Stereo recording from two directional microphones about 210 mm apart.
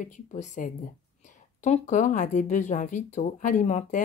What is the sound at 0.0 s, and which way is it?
Speech, 35° left (ahead or behind).